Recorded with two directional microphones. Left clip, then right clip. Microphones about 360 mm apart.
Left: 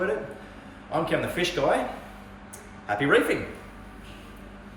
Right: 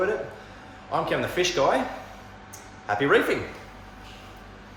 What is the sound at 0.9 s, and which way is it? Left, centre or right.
Speech, centre.